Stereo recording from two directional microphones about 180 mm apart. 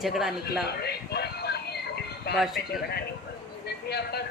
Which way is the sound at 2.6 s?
65° left (ahead or behind).